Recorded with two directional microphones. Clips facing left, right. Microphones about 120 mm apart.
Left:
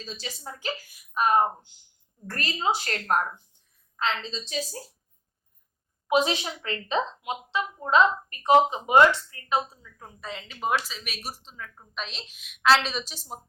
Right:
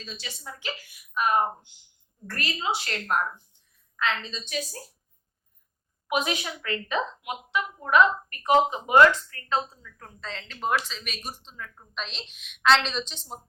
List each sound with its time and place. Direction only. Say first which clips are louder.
0.0 s speech: left 2 dB; 40° left (ahead or behind)
3.9 s a woman's voice: even; 30° left (ahead or behind)
6.1 s a woman's voice: left 4 dB; 25° left (ahead or behind); by 13.4 s 5° left (ahead or behind)